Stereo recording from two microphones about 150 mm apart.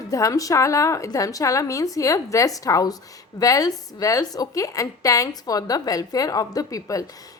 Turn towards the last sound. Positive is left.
turn(degrees=20)  # may be behind; listen again after turning